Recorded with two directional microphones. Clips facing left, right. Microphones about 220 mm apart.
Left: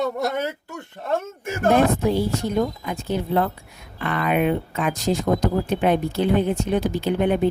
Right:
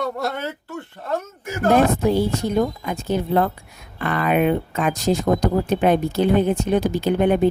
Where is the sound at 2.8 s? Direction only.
45° right (ahead or behind).